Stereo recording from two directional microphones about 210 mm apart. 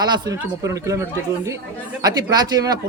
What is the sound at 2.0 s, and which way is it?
Speech, 20° right (ahead or behind).